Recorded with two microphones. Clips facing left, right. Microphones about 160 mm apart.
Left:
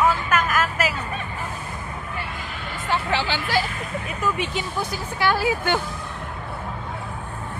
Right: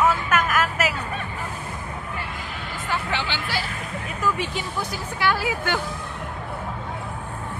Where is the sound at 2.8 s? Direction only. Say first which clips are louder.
Left 4 dB; 30° left (ahead or behind).